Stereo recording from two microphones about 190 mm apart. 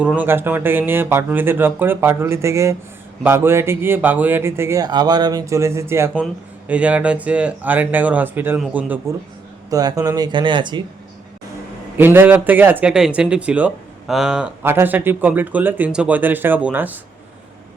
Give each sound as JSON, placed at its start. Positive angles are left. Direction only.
{"t": 0.0, "sound": "a man's voice", "side_deg": -5}
{"t": 9.6, "sound": "speech", "side_deg": -20}
{"t": 11.9, "sound": "speech", "side_deg": -10}